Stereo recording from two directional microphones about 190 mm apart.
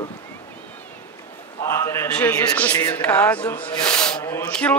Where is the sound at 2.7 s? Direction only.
20° left (ahead or behind).